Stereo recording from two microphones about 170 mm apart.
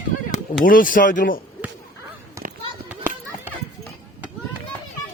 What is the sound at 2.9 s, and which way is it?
Children playing, 10° right (ahead or behind).